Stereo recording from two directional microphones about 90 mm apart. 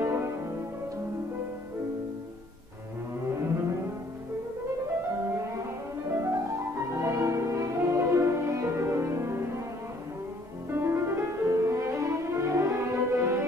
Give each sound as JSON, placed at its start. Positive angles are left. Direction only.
{"t": 0.0, "sound": "music", "side_deg": -25}
{"t": 6.1, "sound": "music", "side_deg": -30}
{"t": 10.7, "sound": "music", "side_deg": -25}